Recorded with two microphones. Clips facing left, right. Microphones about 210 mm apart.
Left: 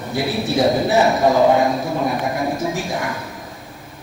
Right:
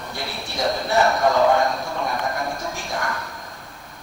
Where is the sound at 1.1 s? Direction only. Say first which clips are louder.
Left 4 dB; 20° left (ahead or behind).